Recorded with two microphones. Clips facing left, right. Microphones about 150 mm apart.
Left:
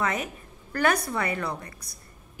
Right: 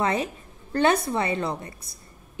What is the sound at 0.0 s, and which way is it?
A woman's voice, 30° right (ahead or behind).